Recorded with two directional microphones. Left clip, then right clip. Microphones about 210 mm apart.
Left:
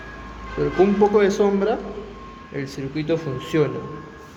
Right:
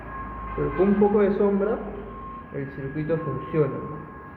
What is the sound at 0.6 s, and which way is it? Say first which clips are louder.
Speech: left 4 dB; 60° left (ahead or behind).